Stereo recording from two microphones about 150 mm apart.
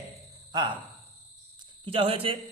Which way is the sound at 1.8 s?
40° right (ahead or behind).